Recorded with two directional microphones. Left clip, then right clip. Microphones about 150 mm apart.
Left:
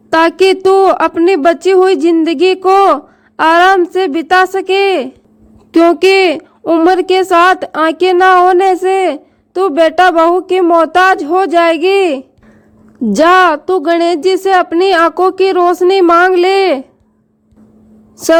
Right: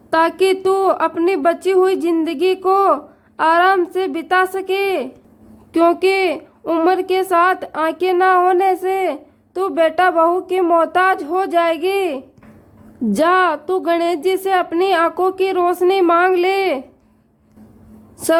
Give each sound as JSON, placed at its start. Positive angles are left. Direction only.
{"t": 0.1, "sound": "speech", "side_deg": 45}